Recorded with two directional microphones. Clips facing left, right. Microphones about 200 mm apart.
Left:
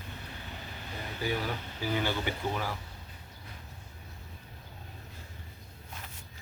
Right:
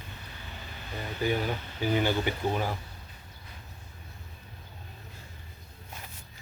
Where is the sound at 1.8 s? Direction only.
20° right (ahead or behind).